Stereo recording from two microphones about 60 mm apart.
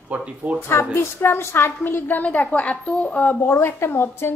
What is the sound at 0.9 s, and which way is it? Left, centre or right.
A woman's voice, left.